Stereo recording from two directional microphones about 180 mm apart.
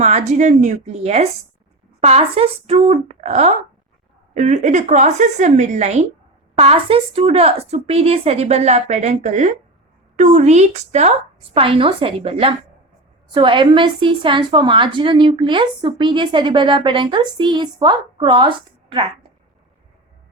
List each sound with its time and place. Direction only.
0.0 s a woman's voice: 40° right (ahead or behind)